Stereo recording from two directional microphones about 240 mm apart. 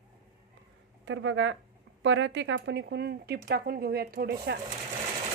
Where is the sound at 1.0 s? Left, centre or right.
Right.